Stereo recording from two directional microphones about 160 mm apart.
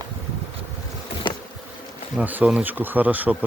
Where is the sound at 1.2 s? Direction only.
30° left (ahead or behind).